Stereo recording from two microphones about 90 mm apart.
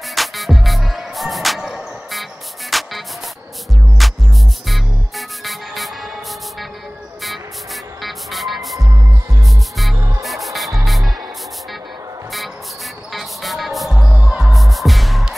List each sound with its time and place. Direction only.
0.1 s music: centre (ahead or behind)
4.0 s music: centre (ahead or behind)
8.0 s music: centre (ahead or behind)
9.9 s music: 35° right (ahead or behind)
10.2 s music: centre (ahead or behind)
13.1 s music: centre (ahead or behind)